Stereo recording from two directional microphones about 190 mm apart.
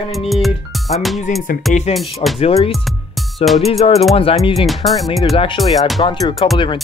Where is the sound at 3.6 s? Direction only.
35° left (ahead or behind).